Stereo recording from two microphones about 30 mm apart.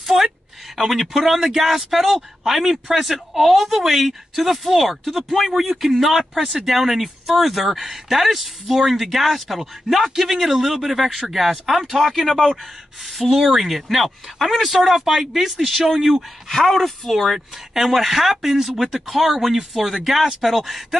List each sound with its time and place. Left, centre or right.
0.0 s a sound: centre
0.7 s speech: centre
17.9 s speech: centre